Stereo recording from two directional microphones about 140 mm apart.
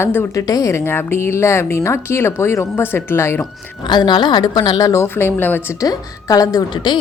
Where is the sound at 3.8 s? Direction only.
30° left (ahead or behind); by 5.6 s 15° left (ahead or behind).